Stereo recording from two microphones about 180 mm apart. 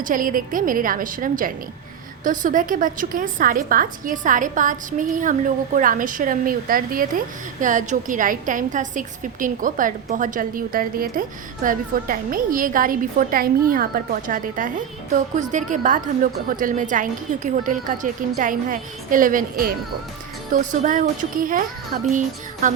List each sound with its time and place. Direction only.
0.0 s a woman's voice: 50° right (ahead or behind)
22.6 s a woman's voice: 45° right (ahead or behind)